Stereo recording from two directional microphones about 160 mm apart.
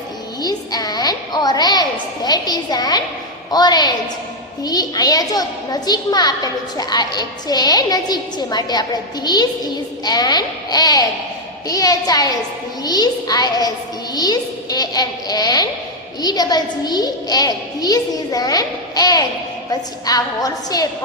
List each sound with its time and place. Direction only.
0.4 s a woman's voice: 25° left (ahead or behind)